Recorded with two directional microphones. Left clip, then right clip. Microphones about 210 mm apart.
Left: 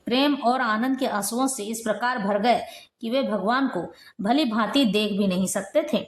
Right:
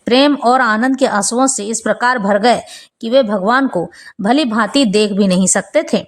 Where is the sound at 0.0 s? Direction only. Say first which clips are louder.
Right 11 dB; 35° right (ahead or behind).